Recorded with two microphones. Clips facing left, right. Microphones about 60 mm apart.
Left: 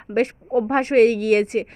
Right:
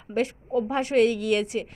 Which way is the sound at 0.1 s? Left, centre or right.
Left.